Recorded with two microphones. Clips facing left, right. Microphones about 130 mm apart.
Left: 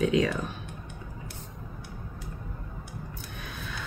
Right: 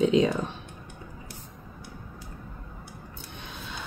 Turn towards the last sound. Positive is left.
turn(degrees=-20)  # may be behind; listen again after turning